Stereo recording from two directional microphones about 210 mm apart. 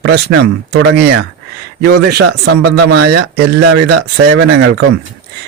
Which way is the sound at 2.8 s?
90° right.